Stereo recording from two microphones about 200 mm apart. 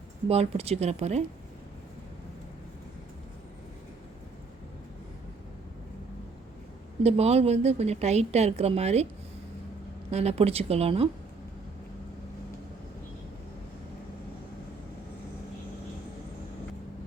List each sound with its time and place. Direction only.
0.3 s a woman's voice: 30° right (ahead or behind)
7.0 s a woman's voice: 30° right (ahead or behind)
10.1 s a woman's voice: 30° right (ahead or behind)